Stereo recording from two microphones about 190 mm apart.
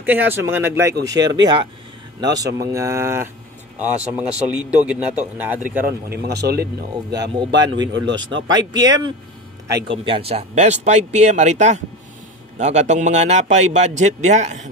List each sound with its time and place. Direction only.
0.0 s a man's voice: 10° right (ahead or behind)
6.0 s speech: 60° right (ahead or behind)
7.3 s a man's voice: 20° right (ahead or behind)
10.0 s a man's voice: 30° right (ahead or behind)